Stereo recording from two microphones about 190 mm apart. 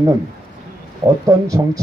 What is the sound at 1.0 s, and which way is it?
Speech, 20° right (ahead or behind).